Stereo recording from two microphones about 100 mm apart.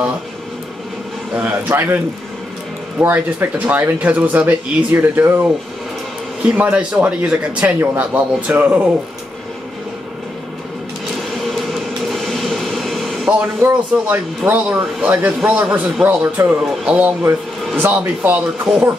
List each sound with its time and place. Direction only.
1.3 s speech: 15° right (ahead or behind)
3.0 s speech: 20° right (ahead or behind)
11.1 s vehicle: centre (ahead or behind)
13.6 s speech: 20° right (ahead or behind)